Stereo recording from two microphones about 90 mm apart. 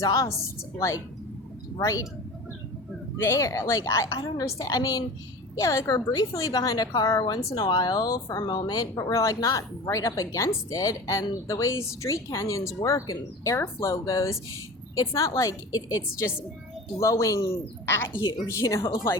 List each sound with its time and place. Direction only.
0.0 s a woman's voice: 40° left (ahead or behind)
3.2 s a woman's voice: 30° left (ahead or behind)
17.8 s a woman's voice: 25° left (ahead or behind)